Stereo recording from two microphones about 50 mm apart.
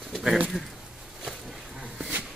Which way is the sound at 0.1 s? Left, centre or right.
Centre.